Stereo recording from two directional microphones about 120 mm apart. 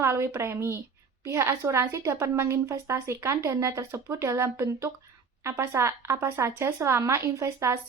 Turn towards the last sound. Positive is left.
turn(degrees=-25)  # may be behind; listen again after turning